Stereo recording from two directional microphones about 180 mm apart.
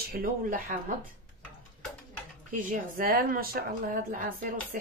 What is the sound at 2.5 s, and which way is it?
Speech, 50° right (ahead or behind).